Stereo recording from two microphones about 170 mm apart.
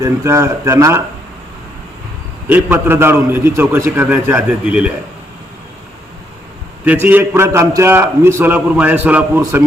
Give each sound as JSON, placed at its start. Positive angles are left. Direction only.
{"t": 0.0, "sound": "a man's voice", "side_deg": -15}
{"t": 2.5, "sound": "a man's voice", "side_deg": -10}
{"t": 6.8, "sound": "a man's voice", "side_deg": -10}